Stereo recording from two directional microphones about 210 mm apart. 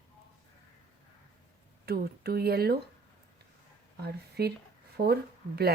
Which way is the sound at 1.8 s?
50° right (ahead or behind).